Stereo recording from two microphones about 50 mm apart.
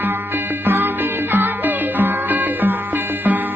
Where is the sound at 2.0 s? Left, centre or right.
Right.